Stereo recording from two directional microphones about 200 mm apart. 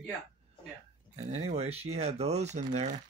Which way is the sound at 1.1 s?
35° right (ahead or behind).